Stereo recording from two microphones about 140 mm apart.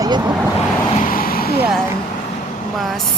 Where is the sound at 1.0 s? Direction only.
90° left.